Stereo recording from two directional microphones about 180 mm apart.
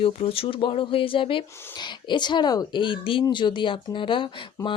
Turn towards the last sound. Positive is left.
turn(degrees=25)  # may be behind; listen again after turning